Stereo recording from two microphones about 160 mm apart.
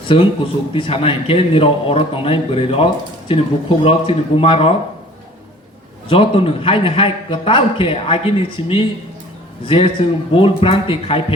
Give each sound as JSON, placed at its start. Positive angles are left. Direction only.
{"t": 0.1, "sound": "a man's voice", "side_deg": 35}
{"t": 6.1, "sound": "a man's voice", "side_deg": 35}